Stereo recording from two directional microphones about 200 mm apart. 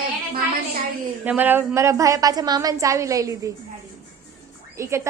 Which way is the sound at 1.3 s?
10° right (ahead or behind).